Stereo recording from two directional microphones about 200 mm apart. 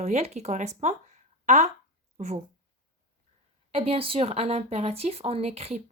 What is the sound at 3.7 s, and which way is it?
Speech, 30° right (ahead or behind).